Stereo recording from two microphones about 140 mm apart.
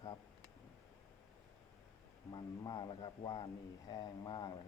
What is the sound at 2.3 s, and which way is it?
Speech, 30° left (ahead or behind).